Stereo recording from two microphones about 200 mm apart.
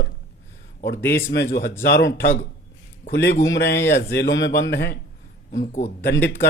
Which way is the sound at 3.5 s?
60° left (ahead or behind).